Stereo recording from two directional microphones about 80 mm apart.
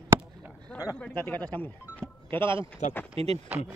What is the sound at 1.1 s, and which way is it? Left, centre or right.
Speech, left.